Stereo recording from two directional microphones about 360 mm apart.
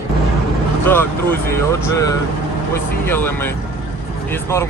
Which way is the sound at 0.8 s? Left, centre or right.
Centre.